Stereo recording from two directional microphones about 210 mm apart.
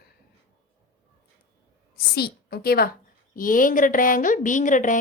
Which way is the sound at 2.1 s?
50° left (ahead or behind).